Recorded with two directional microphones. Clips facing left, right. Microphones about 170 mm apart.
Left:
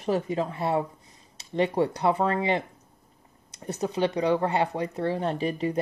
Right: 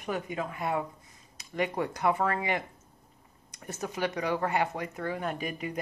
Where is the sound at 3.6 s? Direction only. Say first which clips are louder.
Left 6 dB; 20° left (ahead or behind).